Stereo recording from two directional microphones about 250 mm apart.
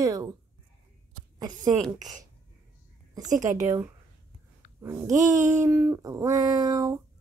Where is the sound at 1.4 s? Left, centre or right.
Centre.